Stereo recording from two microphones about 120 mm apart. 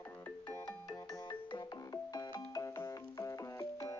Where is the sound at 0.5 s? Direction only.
30° left (ahead or behind).